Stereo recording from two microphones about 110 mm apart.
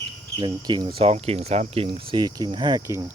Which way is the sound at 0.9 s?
65° right (ahead or behind).